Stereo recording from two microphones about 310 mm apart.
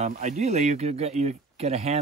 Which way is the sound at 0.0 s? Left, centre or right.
Right.